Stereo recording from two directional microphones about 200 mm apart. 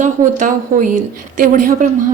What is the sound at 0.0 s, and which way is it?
A woman's voice, 40° right (ahead or behind).